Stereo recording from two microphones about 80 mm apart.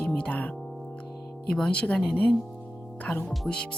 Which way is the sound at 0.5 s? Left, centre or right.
Centre.